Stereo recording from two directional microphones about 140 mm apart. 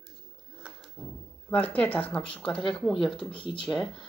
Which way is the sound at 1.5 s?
10° left (ahead or behind).